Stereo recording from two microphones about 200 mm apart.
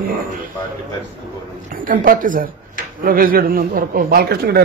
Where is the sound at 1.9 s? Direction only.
45° right (ahead or behind).